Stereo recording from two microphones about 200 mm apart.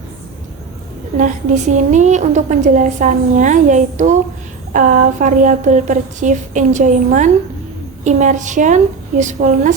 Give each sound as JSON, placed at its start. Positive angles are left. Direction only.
{"t": 1.1, "sound": "a woman's voice", "side_deg": -40}